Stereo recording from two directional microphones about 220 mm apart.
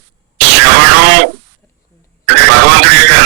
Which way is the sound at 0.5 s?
50° right (ahead or behind).